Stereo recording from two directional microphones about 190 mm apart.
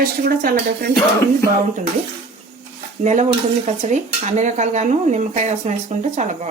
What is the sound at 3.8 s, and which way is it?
Speech, 40° right (ahead or behind).